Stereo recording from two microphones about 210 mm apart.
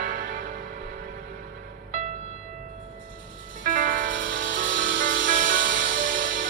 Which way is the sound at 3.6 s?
40° right (ahead or behind).